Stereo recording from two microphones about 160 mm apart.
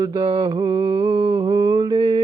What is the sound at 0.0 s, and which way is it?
Mantra, 30° right (ahead or behind).